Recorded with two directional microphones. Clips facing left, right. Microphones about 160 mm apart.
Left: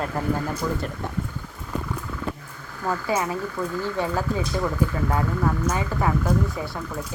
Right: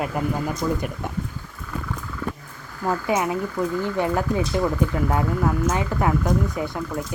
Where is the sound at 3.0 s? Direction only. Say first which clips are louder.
Right 2 dB; 15° right (ahead or behind).